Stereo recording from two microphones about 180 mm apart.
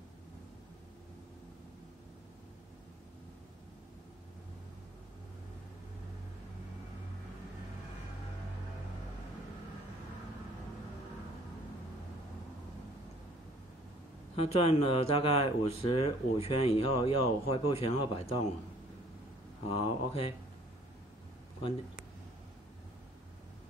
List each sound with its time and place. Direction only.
14.3 s speech: 30° left (ahead or behind)
19.7 s speech: 35° left (ahead or behind)